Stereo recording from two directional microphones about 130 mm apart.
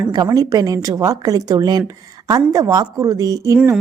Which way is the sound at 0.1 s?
30° right (ahead or behind).